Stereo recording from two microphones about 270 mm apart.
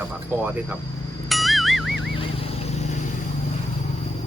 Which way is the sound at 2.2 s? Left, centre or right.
Left.